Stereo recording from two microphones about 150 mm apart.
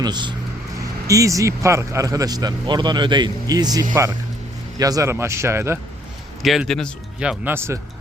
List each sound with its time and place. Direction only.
0.0 s speech: 30° right (ahead or behind)
6.4 s speech: centre (ahead or behind)
7.2 s speech: 10° right (ahead or behind)